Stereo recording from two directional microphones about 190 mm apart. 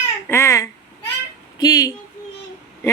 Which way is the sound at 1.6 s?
20° left (ahead or behind).